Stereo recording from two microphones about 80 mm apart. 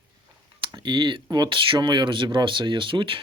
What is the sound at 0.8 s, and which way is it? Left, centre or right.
Speech, right.